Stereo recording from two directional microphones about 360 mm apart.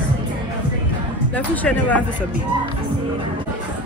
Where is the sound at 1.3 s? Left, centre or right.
Centre.